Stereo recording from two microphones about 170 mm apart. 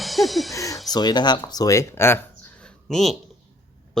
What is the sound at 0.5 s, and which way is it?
Music, 20° left (ahead or behind).